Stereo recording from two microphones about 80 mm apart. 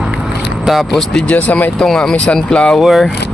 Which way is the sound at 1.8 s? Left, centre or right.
Centre.